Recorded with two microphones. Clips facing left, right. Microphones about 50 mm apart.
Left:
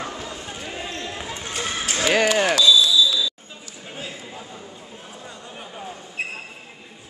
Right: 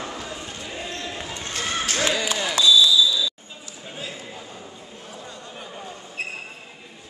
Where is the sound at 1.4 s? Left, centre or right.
Centre.